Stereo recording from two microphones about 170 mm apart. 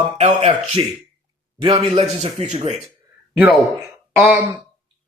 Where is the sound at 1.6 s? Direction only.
35° right (ahead or behind).